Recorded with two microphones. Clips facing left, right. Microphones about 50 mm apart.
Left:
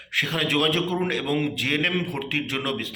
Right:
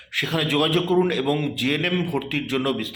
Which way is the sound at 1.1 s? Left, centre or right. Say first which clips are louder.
Right 2 dB; left.